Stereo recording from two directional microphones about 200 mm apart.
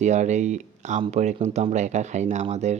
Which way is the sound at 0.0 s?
35° right (ahead or behind).